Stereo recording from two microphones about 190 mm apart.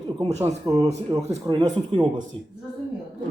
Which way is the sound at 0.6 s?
20° right (ahead or behind).